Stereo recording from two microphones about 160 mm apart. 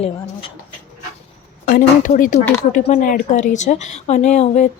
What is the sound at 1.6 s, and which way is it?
A woman's voice, 60° left (ahead or behind).